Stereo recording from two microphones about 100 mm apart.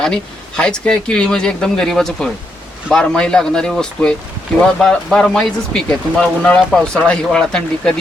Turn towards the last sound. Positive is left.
turn(degrees=10)  # may be behind; listen again after turning